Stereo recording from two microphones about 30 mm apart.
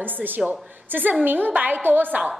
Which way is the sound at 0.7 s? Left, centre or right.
Right.